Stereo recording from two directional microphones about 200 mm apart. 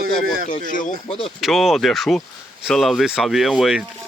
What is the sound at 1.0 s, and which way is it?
Speech, 25° left (ahead or behind).